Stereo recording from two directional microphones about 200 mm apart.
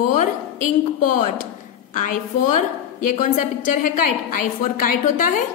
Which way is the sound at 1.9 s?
40° left (ahead or behind).